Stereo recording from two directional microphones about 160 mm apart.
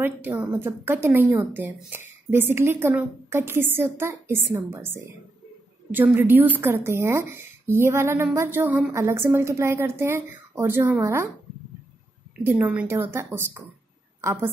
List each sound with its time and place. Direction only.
0.0 s a woman's voice: 10° right (ahead or behind)
12.4 s a woman's voice: 10° right (ahead or behind)